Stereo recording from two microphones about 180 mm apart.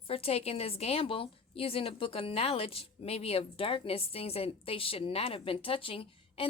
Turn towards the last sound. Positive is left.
turn(degrees=30)  # may be behind; listen again after turning